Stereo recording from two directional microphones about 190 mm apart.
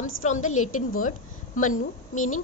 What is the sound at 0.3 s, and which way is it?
A woman's voice, 40° left (ahead or behind).